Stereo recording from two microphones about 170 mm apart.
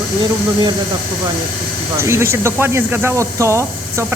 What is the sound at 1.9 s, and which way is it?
Speech, 15° right (ahead or behind).